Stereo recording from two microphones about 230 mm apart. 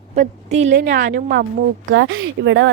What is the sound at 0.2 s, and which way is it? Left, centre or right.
A woman's voice, right.